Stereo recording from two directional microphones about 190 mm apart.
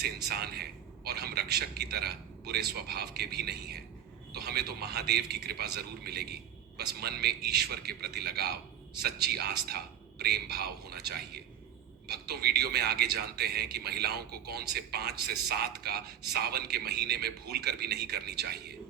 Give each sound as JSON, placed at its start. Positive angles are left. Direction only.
{"t": 0.3, "sound": "speech", "side_deg": -55}